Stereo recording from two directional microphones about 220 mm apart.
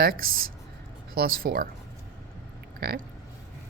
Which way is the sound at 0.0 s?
40° right (ahead or behind).